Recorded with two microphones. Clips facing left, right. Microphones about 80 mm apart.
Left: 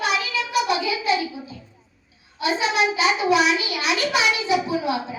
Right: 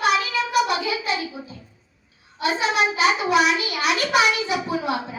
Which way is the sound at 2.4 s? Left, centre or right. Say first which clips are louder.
Even; right.